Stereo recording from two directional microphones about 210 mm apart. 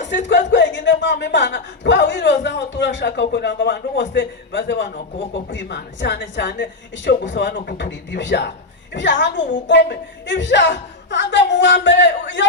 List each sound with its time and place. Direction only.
0.3 s speech: 55° left (ahead or behind)